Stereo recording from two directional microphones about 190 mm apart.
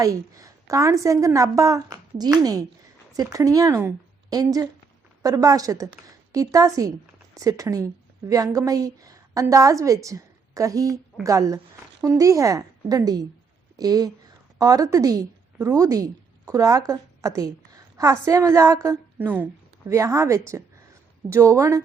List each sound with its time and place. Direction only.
0.0 s a woman's voice: 15° right (ahead or behind)